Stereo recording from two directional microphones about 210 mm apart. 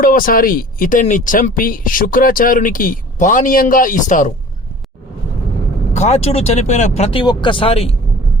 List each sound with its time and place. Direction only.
0.0 s speech: 40° left (ahead or behind)
5.9 s speech: 30° left (ahead or behind)